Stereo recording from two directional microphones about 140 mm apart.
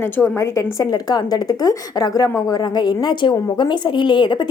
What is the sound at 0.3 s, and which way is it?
A woman's voice, 20° left (ahead or behind).